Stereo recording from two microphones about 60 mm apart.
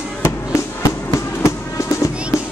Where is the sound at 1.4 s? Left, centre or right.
Left.